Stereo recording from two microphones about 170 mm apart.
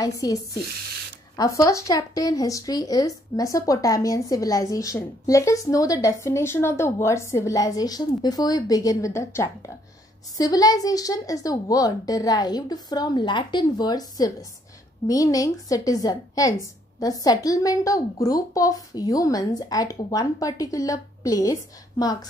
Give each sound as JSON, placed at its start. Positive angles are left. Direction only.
{"t": 0.0, "sound": "speech", "side_deg": 20}